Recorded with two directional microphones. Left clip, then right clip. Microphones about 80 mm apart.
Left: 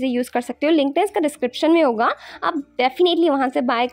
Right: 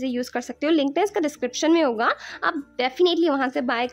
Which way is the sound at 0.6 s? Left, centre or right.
Centre.